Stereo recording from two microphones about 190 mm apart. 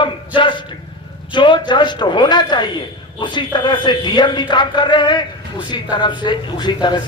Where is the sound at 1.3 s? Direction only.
25° left (ahead or behind).